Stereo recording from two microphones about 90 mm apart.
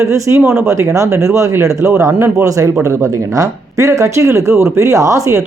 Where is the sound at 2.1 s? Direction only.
20° right (ahead or behind).